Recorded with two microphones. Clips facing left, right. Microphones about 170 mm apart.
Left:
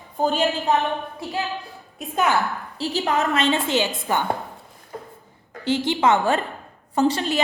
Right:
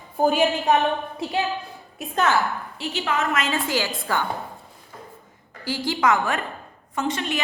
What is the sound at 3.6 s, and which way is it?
Speech, 20° left (ahead or behind).